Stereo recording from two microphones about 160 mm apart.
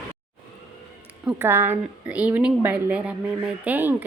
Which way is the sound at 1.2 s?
15° right (ahead or behind).